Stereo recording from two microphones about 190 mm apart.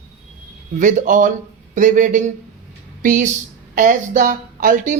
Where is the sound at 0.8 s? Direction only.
40° right (ahead or behind).